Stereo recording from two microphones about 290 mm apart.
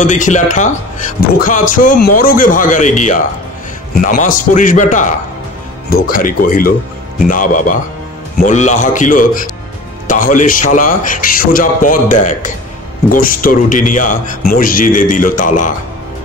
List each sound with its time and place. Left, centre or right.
0.0 s speech: left